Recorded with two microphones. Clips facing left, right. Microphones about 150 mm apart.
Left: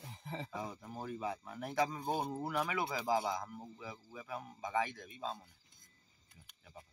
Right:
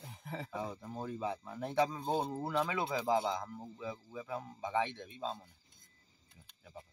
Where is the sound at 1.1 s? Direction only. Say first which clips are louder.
Right 1 dB; 25° right (ahead or behind).